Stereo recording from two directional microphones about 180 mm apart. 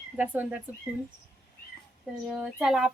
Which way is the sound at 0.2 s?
10° right (ahead or behind).